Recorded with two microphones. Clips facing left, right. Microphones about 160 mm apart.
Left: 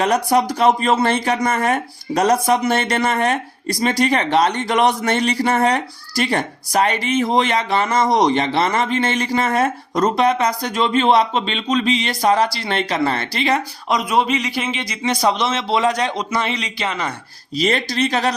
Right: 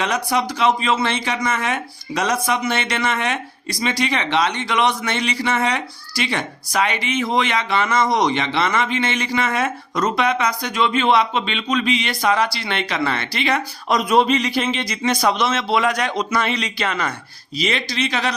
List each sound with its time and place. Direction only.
0.0 s speech: 45° left (ahead or behind)
13.9 s a man's voice: 15° left (ahead or behind)
17.6 s speech: 45° left (ahead or behind)